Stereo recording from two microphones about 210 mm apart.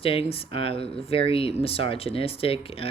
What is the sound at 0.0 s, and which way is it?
Speech, 25° left (ahead or behind).